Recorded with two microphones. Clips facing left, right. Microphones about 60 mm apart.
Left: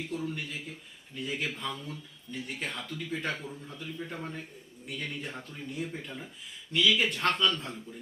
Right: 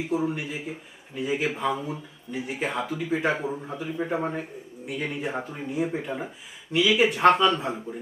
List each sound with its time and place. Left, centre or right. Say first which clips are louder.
0.2 s a man's voice: right 8 dB; centre
4.9 s speech: right 8 dB; centre